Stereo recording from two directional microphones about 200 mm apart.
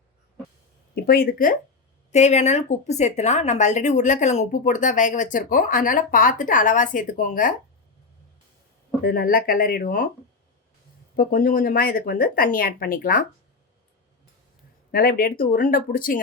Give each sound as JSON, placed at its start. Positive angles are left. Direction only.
{"t": 1.0, "sound": "speech", "side_deg": 50}
{"t": 2.1, "sound": "speech", "side_deg": 35}
{"t": 9.0, "sound": "speech", "side_deg": 45}
{"t": 11.2, "sound": "speech", "side_deg": 45}
{"t": 14.9, "sound": "speech", "side_deg": 45}